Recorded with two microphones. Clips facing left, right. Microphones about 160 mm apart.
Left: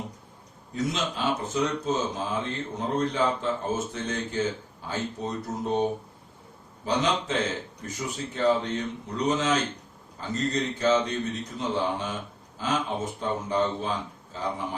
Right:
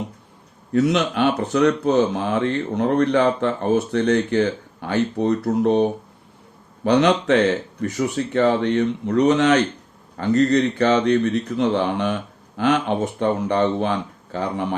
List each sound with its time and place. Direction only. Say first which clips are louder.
0.7 s speech: right 11 dB; 70° right (ahead or behind)
6.8 s speech: right 10 dB; 70° right (ahead or behind)